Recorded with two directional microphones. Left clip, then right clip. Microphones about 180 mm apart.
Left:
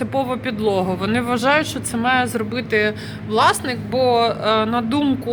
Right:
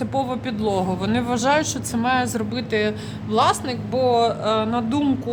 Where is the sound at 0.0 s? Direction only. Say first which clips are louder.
Left 3 dB; 5° right (ahead or behind).